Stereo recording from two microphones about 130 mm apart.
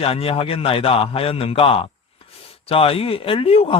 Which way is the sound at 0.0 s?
45° left (ahead or behind).